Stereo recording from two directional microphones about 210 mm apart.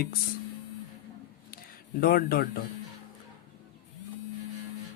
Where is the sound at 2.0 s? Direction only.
45° left (ahead or behind).